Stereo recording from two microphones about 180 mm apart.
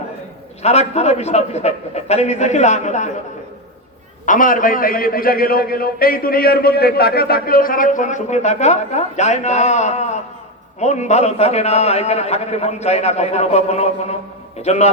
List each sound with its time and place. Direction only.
0.6 s a man's voice: 35° left (ahead or behind)
4.3 s a man's voice: 50° left (ahead or behind)